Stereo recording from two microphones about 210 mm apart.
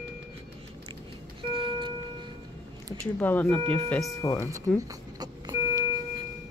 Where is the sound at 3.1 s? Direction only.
10° left (ahead or behind).